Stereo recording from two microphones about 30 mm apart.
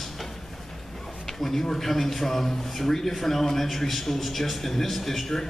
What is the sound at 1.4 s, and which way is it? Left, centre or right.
A man's voice, centre.